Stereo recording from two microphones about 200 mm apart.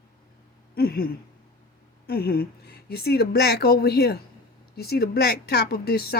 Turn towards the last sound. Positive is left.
turn(degrees=50)  # may be behind; listen again after turning